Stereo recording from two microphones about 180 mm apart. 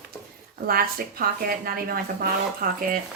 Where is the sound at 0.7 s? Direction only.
55° right (ahead or behind).